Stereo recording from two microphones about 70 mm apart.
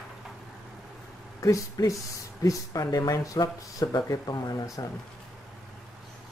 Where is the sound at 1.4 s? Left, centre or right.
Left.